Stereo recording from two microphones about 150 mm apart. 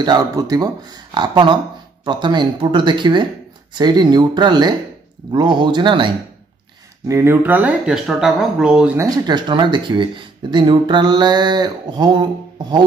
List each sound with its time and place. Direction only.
0.0 s speech: 25° right (ahead or behind)
7.1 s speech: 15° right (ahead or behind)
8.9 s speech: 25° right (ahead or behind)